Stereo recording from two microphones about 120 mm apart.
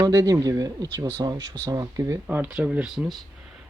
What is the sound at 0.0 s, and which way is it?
Speech, 30° right (ahead or behind).